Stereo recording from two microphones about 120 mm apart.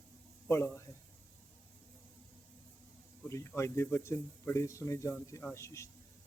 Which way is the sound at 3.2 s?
20° left (ahead or behind).